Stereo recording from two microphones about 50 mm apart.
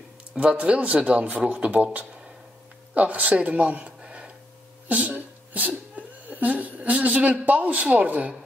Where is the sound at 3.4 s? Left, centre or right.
Right.